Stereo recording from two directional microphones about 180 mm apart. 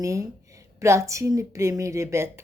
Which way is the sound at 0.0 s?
15° right (ahead or behind).